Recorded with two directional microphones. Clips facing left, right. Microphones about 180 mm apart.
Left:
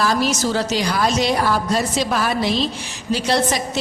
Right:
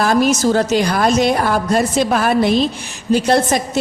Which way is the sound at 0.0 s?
50° right (ahead or behind).